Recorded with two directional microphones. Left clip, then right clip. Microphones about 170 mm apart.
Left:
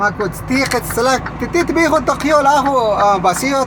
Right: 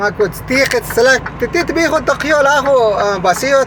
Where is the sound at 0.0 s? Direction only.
10° left (ahead or behind).